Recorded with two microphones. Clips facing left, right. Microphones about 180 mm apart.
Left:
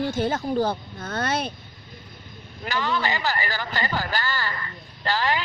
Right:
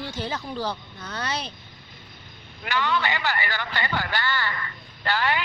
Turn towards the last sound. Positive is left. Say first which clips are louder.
# left 1 dB
turn(degrees=35)  # may be behind; listen again after turning